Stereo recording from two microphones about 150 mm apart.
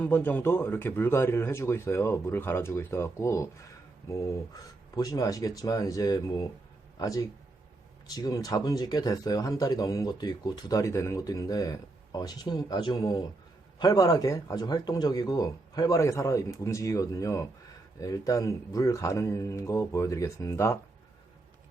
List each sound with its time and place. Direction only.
0.0 s speech: 15° left (ahead or behind)
4.5 s speech: 25° left (ahead or behind)